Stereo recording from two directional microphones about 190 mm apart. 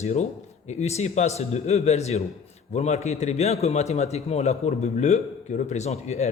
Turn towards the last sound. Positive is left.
turn(degrees=35)  # may be behind; listen again after turning